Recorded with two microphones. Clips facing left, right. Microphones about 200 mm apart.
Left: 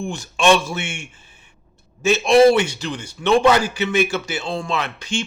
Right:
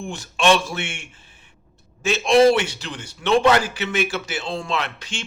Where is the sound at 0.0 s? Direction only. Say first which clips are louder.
Left 2 dB; centre (ahead or behind).